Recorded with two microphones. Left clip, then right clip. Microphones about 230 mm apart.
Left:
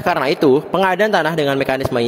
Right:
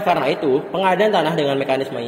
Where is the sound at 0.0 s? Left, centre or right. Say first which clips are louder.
Left 2 dB; left.